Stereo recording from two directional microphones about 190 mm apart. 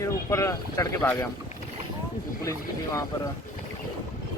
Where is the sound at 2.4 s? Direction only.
15° left (ahead or behind).